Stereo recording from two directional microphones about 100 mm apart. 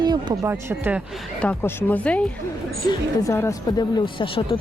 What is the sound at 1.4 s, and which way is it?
Speech, 15° left (ahead or behind).